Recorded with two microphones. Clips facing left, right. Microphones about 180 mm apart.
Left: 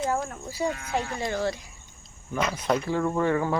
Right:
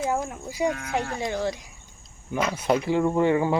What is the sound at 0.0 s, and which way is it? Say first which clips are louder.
Speech: right 1 dB; 15° right (ahead or behind).